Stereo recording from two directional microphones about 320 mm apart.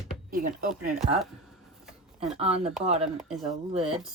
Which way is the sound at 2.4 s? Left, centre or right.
Centre.